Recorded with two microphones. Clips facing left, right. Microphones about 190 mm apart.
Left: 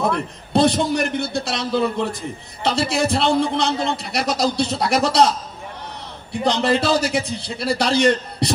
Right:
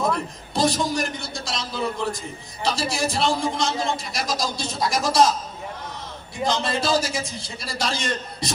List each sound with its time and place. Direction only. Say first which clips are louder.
0.1 s a man's voice: left 6 dB; 65° left (ahead or behind)
6.4 s a man's voice: left 5 dB; 65° left (ahead or behind)